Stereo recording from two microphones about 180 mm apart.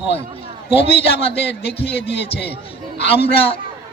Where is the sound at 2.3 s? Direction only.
70° left (ahead or behind).